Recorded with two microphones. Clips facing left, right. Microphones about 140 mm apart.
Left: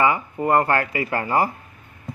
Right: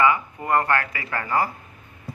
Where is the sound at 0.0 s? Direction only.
30° left (ahead or behind).